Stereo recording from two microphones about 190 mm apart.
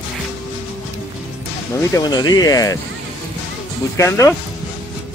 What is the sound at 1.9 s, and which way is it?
Speech, 20° left (ahead or behind).